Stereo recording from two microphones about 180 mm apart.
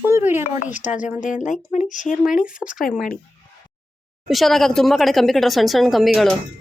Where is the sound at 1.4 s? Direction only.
45° left (ahead or behind).